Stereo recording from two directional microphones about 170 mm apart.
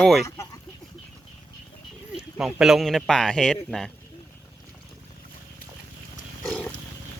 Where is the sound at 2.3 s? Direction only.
5° right (ahead or behind).